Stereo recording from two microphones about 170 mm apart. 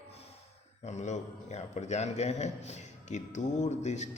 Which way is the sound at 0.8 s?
40° left (ahead or behind).